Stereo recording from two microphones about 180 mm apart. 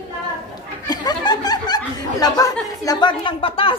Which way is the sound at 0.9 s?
20° left (ahead or behind).